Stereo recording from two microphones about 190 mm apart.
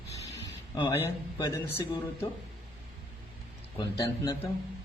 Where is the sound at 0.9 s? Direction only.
15° left (ahead or behind).